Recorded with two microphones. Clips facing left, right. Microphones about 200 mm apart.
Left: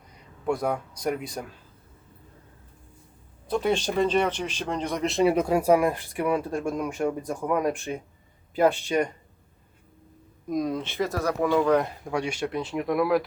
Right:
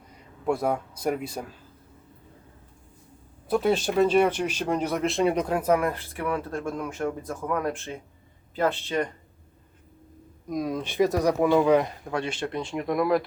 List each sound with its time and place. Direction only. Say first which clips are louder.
0.4 s speech: right 1 dB; 5° right (ahead or behind)
3.5 s speech: right 2 dB; 5° right (ahead or behind); by 9.0 s 15° left (ahead or behind)
10.5 s speech: left 1 dB; 5° right (ahead or behind)
12.0 s speech: left 1 dB; 10° left (ahead or behind)